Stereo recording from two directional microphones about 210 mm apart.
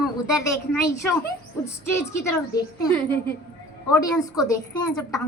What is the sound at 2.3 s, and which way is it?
A woman's voice, 15° left (ahead or behind).